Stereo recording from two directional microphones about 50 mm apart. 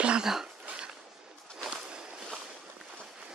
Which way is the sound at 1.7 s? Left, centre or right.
Centre.